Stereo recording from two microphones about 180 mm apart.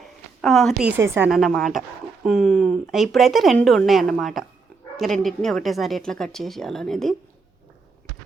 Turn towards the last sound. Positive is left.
turn(degrees=0)  # may be behind; listen again after turning